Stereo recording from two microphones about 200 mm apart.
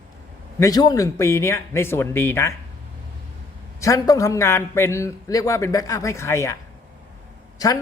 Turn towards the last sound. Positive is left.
turn(degrees=15)  # may be behind; listen again after turning